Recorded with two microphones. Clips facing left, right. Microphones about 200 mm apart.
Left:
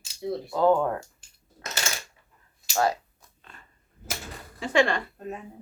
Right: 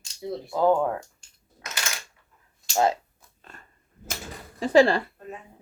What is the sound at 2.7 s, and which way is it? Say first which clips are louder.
Speech: right 2 dB; 20° right (ahead or behind).